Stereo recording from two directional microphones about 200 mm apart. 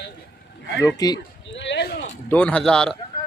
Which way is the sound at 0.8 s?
15° left (ahead or behind).